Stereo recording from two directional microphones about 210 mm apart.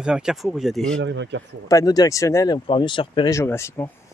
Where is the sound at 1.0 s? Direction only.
60° right (ahead or behind).